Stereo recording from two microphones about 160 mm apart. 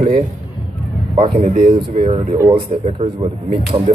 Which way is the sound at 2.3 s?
20° right (ahead or behind).